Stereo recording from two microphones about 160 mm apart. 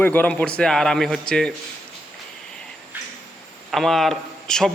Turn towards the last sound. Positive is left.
turn(degrees=5)  # may be behind; listen again after turning